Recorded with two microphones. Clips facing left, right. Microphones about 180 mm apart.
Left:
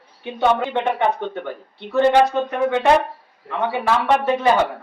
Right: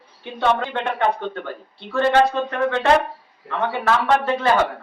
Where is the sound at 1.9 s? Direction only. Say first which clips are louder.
Left 2 dB; 20° left (ahead or behind).